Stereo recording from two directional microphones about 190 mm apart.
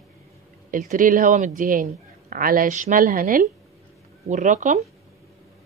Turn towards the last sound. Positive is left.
turn(degrees=-40)  # may be behind; listen again after turning